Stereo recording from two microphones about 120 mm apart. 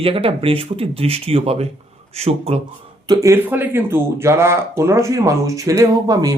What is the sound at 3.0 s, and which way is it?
Speech, 30° right (ahead or behind).